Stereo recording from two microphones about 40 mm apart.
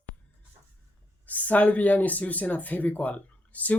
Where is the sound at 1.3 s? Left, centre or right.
Left.